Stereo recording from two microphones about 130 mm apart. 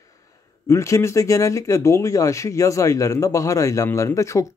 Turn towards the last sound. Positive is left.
turn(degrees=25)  # may be behind; listen again after turning